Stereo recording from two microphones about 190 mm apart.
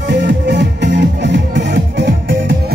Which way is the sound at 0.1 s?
65° right (ahead or behind).